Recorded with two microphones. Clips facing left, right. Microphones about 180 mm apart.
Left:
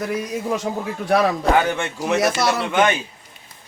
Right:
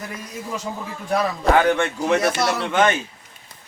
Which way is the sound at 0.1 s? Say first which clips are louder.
Left 8 dB; 75° left (ahead or behind).